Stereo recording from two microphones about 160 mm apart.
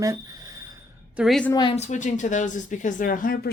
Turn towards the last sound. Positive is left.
turn(degrees=65)  # may be behind; listen again after turning